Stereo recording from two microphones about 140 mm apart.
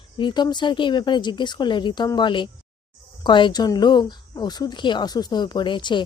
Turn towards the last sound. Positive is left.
turn(degrees=35)  # may be behind; listen again after turning